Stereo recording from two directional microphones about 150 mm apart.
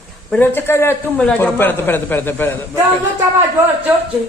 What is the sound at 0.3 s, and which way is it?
A man's voice, 10° left (ahead or behind).